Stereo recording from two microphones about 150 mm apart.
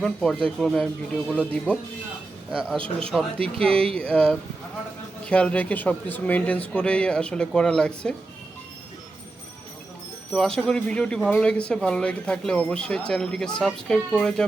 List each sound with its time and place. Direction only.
0.0 s speech: 5° left (ahead or behind)
2.7 s a man's voice: 35° right (ahead or behind)
3.1 s speech: 5° left (ahead or behind)
10.3 s speech: 5° left (ahead or behind)